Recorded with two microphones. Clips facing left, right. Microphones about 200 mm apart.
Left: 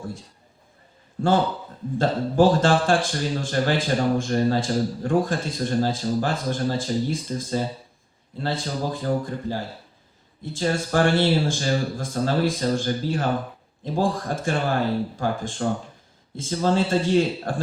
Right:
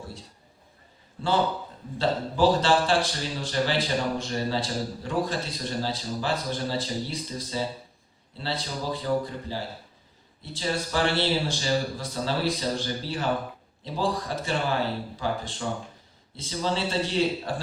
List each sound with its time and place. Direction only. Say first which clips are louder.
1.2 s speech: left 4 dB; 50° left (ahead or behind)